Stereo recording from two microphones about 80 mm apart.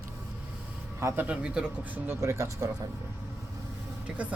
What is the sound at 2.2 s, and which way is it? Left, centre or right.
Speech, right.